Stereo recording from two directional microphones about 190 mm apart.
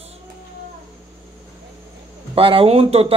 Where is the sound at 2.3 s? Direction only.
30° right (ahead or behind).